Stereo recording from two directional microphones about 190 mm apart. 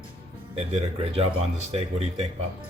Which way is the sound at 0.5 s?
30° right (ahead or behind).